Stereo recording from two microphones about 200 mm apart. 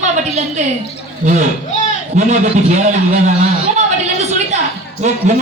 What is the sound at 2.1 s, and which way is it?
A man's voice, 35° right (ahead or behind).